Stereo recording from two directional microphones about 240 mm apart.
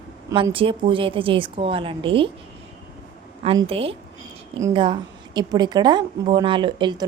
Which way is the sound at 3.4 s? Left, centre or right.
Right.